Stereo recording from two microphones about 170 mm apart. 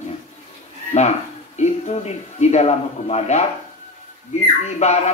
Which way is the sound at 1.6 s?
40° left (ahead or behind).